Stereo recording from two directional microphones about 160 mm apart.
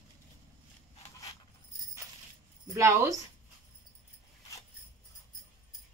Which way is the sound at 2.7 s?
20° right (ahead or behind).